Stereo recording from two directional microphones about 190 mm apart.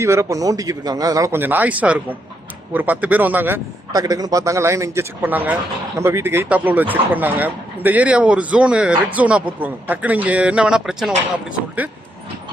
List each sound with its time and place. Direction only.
0.0 s speech: 15° right (ahead or behind)